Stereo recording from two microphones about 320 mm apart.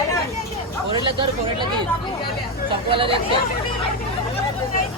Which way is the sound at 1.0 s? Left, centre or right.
Centre.